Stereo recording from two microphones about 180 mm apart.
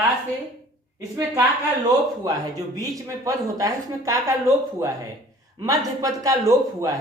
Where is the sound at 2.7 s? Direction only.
20° right (ahead or behind).